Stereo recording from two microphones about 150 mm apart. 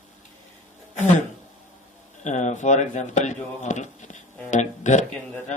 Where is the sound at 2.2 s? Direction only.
50° left (ahead or behind).